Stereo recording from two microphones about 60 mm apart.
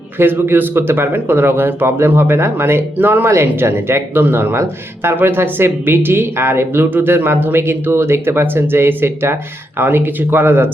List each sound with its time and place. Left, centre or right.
0.2 s speech: right